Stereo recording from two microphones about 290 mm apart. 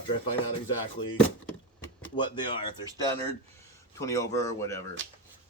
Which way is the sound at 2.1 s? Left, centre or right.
Centre.